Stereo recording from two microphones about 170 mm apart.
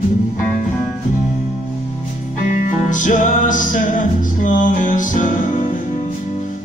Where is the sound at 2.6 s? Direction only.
50° left (ahead or behind).